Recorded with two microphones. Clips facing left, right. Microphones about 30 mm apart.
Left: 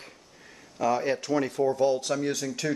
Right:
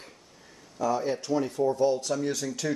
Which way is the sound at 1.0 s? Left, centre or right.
Left.